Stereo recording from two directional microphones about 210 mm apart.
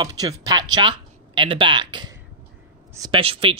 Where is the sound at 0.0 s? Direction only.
20° right (ahead or behind).